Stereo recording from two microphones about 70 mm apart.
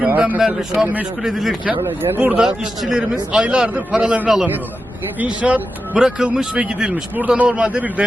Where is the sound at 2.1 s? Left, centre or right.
Centre.